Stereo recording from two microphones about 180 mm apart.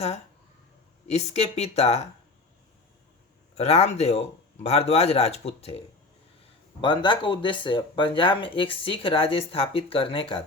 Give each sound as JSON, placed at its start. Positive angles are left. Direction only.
{"t": 1.0, "sound": "speech", "side_deg": 35}
{"t": 3.5, "sound": "speech", "side_deg": 35}
{"t": 6.8, "sound": "speech", "side_deg": 25}